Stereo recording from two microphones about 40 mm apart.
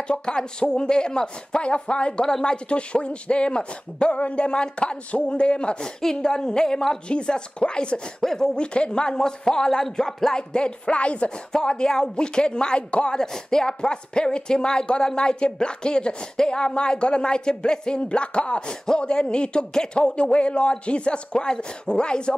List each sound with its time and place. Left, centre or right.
0.1 s speech: left
8.2 s speech: centre
8.5 s speech: left
11.5 s speech: centre